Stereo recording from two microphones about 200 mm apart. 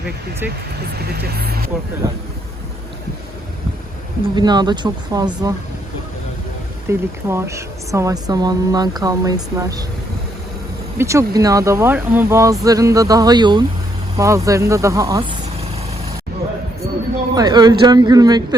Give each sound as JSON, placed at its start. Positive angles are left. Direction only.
{"t": 0.9, "sound": "speech", "side_deg": -50}
{"t": 4.4, "sound": "speech", "side_deg": -20}
{"t": 6.8, "sound": "speech", "side_deg": -15}
{"t": 10.9, "sound": "speech", "side_deg": -15}
{"t": 17.3, "sound": "speech", "side_deg": -20}